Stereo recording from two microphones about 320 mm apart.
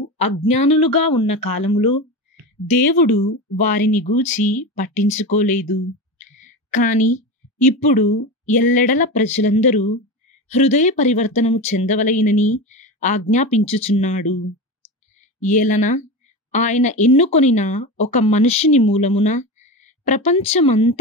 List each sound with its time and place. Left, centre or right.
0.5 s speech: centre
3.1 s a woman's voice: left
15.4 s speech: left
19.6 s a sound: left
20.2 s speech: centre